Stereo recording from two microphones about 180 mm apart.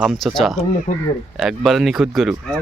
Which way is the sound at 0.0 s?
Centre (ahead or behind).